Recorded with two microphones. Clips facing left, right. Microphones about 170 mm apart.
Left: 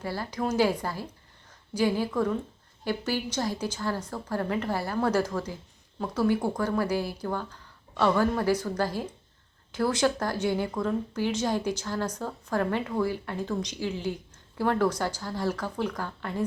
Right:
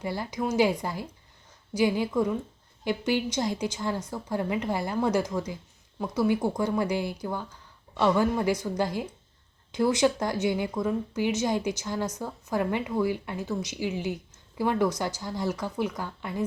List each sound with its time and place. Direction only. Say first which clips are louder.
0.0 s speech: right 1 dB; 15° right (ahead or behind)